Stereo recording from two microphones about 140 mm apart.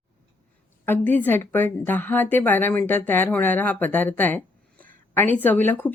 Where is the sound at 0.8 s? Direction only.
15° left (ahead or behind).